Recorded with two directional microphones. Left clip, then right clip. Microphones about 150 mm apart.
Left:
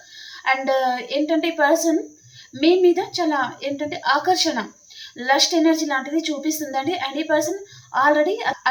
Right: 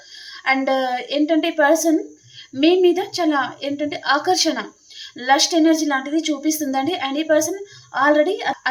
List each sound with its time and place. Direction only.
0.4 s a woman's voice: 30° right (ahead or behind)